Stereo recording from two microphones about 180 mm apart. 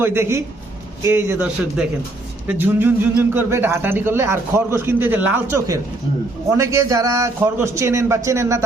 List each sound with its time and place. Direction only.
0.0 s speech: 15° right (ahead or behind)